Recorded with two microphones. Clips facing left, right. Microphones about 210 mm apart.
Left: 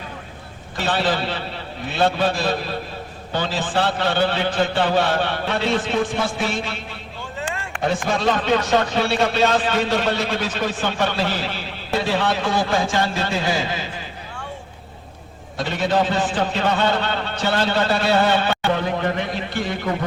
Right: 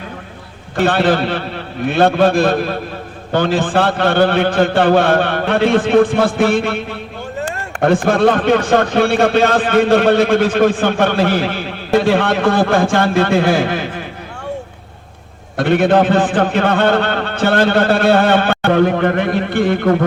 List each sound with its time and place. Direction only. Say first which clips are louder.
0.8 s speech: right 8 dB; 55° right (ahead or behind)
15.5 s speech: right 9 dB; 60° right (ahead or behind)